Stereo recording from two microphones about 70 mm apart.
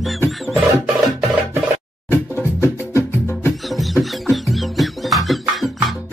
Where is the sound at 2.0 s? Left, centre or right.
Left.